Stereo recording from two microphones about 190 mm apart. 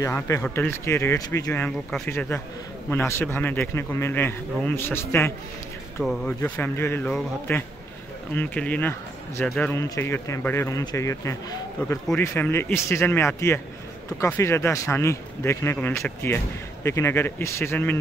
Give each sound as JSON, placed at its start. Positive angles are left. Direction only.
{"t": 0.0, "sound": "a man's voice", "side_deg": 15}
{"t": 6.0, "sound": "a man's voice", "side_deg": 0}
{"t": 6.4, "sound": "a man's voice", "side_deg": 10}